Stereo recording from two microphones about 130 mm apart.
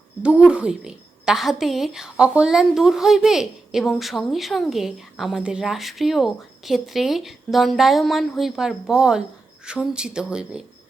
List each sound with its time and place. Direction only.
0.2 s a woman's voice: 10° right (ahead or behind)